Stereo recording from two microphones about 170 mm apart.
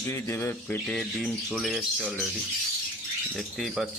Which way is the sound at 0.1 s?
15° left (ahead or behind).